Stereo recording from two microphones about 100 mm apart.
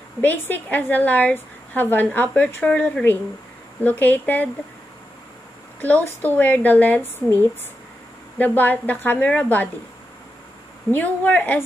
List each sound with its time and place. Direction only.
0.2 s a woman's voice: 15° left (ahead or behind)
5.8 s a woman's voice: 15° left (ahead or behind)
8.4 s a woman's voice: 15° left (ahead or behind)
10.9 s a woman's voice: 15° left (ahead or behind)